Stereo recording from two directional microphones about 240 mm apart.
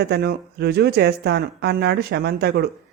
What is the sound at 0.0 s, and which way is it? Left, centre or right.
A man's voice, right.